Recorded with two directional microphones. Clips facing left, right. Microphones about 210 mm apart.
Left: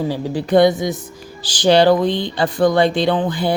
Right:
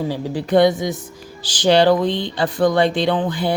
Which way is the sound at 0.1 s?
35° left (ahead or behind).